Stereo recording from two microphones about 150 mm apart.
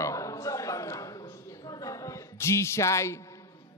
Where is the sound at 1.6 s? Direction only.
25° left (ahead or behind).